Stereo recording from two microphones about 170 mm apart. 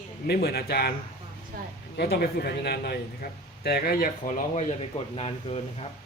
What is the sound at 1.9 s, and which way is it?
Speech, 65° left (ahead or behind).